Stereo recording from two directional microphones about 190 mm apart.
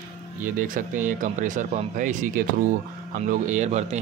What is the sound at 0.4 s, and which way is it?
Speech, 45° right (ahead or behind).